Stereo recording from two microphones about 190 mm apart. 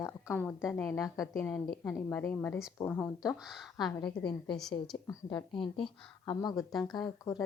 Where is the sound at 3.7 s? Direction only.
20° left (ahead or behind).